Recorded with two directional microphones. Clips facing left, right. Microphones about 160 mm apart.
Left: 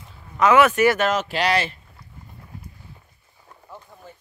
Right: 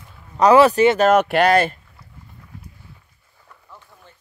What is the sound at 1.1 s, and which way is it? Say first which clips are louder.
Speech: right 7 dB; 60° right (ahead or behind).